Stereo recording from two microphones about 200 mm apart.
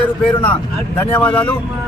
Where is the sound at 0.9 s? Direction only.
10° left (ahead or behind).